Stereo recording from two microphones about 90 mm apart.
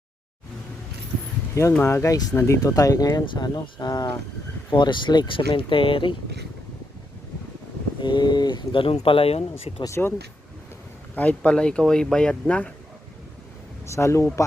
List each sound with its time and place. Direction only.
1.8 s speech: 30° left (ahead or behind)
2.6 s speech: 40° left (ahead or behind)
4.7 s speech: 60° left (ahead or behind)
8.0 s speech: 55° left (ahead or behind); by 9.8 s 90° left
9.8 s speech: 30° left (ahead or behind)
11.1 s speech: 15° left (ahead or behind)
13.8 s speech: 30° left (ahead or behind)